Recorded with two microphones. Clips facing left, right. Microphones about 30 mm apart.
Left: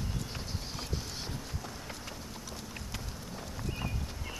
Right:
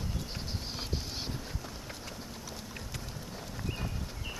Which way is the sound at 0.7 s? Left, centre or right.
Right.